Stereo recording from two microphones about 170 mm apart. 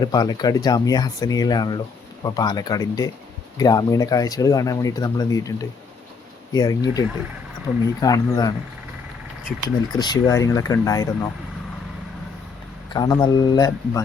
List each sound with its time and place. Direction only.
0.0 s speech: 25° left (ahead or behind)
10.0 s speech: 20° left (ahead or behind)
12.9 s speech: 25° left (ahead or behind)